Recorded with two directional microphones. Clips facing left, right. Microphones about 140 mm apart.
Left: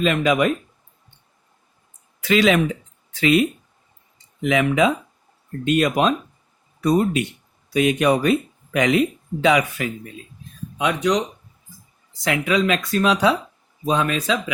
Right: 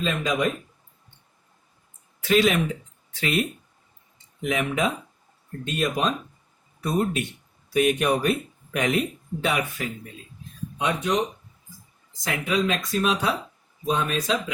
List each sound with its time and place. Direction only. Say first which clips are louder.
0.0 s speech: left 6 dB; 75° left (ahead or behind)
2.2 s speech: left 3 dB; 90° left
12.2 s speech: left 5 dB; 90° left